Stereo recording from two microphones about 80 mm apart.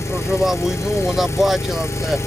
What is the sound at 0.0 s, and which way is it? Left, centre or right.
Vehicle, left.